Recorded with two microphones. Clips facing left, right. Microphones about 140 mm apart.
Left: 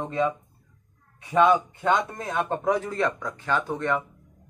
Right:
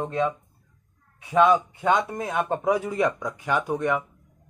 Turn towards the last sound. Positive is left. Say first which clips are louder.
# right 1 dB
turn(degrees=-10)  # may be behind; listen again after turning